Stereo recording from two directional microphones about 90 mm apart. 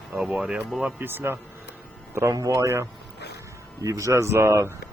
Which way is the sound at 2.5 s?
30° right (ahead or behind).